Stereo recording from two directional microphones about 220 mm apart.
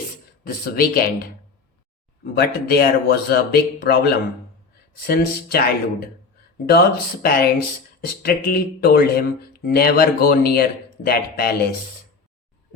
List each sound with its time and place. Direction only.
0.4 s speech: 45° left (ahead or behind)
2.4 s speech: 45° left (ahead or behind)